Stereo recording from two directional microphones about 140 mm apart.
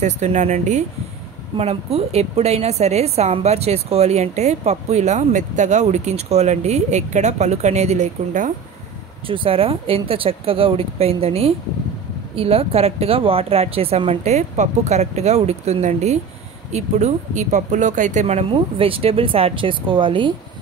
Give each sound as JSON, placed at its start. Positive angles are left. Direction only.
{"t": 0.0, "sound": "speech", "side_deg": -55}
{"t": 1.6, "sound": "a woman's voice", "side_deg": -45}
{"t": 9.3, "sound": "a woman's voice", "side_deg": -40}